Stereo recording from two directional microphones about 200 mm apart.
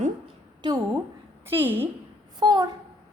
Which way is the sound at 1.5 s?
10° right (ahead or behind).